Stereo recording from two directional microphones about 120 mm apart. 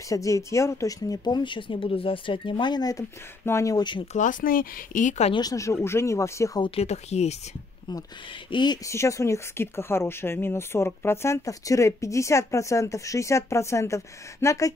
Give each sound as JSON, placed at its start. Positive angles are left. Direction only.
{"t": 0.1, "sound": "speech", "side_deg": 25}
{"t": 4.1, "sound": "speech", "side_deg": 90}
{"t": 5.3, "sound": "speech", "side_deg": 30}
{"t": 6.6, "sound": "speech", "side_deg": 55}
{"t": 8.5, "sound": "speech", "side_deg": 40}
{"t": 8.8, "sound": "speech", "side_deg": 25}